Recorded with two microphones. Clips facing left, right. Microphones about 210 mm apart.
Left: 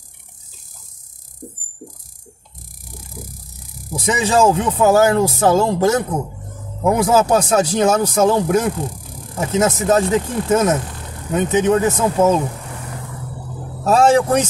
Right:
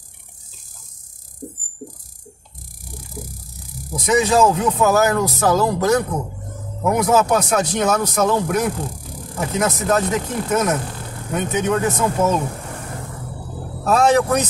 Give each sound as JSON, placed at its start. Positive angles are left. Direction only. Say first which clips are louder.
{"t": 3.9, "sound": "speech", "louder": "right 1 dB", "side_deg": 30}
{"t": 13.8, "sound": "speech", "louder": "left 2 dB", "side_deg": 30}